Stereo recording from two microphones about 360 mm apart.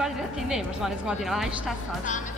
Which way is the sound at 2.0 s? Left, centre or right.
Left.